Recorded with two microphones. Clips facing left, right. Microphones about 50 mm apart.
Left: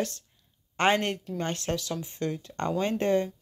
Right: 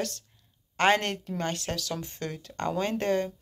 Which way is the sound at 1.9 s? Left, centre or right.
Centre.